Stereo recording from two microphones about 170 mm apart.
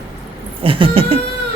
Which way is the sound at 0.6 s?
30° right (ahead or behind).